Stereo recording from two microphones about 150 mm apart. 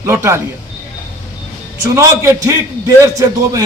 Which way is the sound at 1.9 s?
20° right (ahead or behind).